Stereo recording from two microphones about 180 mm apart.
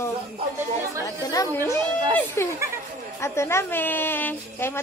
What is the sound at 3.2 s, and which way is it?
A woman's voice, 15° left (ahead or behind).